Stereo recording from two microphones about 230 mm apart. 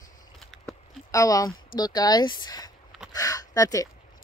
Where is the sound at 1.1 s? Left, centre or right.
Centre.